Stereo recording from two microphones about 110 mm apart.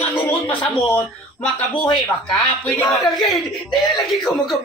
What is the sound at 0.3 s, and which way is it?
Speech, 15° left (ahead or behind).